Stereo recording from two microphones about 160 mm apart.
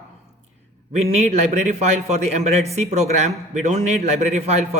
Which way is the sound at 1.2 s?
45° right (ahead or behind).